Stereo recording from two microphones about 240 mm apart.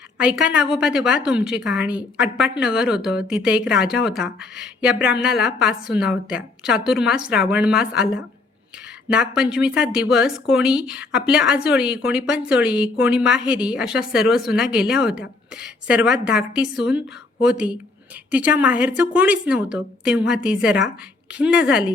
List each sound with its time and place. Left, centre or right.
0.2 s a woman's voice: centre